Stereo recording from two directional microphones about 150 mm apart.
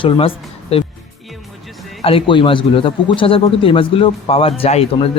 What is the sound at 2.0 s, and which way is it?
Speech, 40° left (ahead or behind).